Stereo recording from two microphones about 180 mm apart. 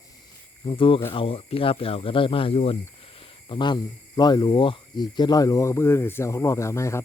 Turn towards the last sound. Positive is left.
turn(degrees=15)  # may be behind; listen again after turning